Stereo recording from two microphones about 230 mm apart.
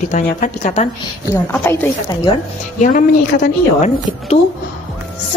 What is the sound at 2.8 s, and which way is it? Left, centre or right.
A woman's voice, left.